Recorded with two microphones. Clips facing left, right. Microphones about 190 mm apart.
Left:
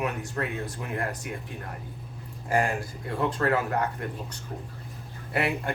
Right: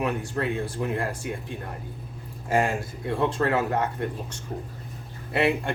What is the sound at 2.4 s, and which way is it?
Speech, 25° right (ahead or behind).